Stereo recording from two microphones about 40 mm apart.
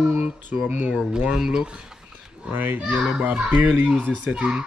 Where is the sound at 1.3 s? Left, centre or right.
Centre.